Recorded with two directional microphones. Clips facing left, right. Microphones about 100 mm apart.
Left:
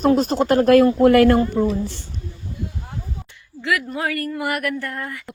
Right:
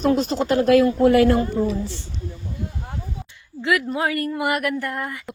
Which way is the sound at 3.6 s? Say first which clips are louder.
Right 2 dB; 20° right (ahead or behind).